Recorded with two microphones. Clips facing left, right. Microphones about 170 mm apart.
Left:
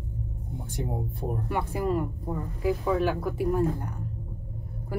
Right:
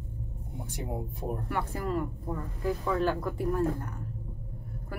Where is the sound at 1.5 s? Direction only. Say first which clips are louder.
Left 5 dB; 15° left (ahead or behind).